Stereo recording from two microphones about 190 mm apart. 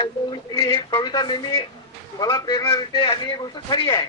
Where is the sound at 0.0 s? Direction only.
25° left (ahead or behind).